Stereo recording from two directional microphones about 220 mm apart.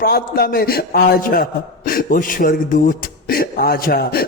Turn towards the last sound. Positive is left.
turn(degrees=45)  # may be behind; listen again after turning